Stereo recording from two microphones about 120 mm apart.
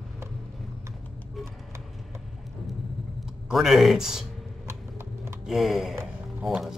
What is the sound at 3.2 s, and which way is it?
Speech, centre (ahead or behind).